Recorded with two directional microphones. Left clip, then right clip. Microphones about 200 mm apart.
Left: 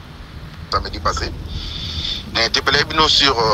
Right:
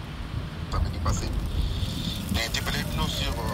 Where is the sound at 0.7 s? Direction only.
40° left (ahead or behind); by 3.5 s 55° left (ahead or behind).